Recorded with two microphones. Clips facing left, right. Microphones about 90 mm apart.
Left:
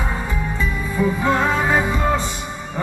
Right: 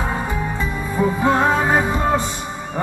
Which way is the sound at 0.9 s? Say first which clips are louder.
Right 2 dB; 25° right (ahead or behind).